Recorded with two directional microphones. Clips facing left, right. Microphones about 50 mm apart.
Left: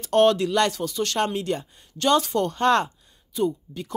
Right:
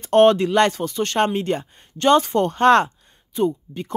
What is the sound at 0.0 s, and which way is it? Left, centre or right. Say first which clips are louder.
Speech: right 4 dB; right.